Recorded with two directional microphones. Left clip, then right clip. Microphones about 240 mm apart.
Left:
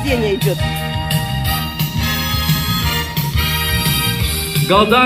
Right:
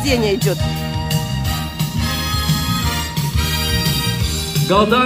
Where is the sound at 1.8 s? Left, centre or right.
Left; by 5.0 s centre.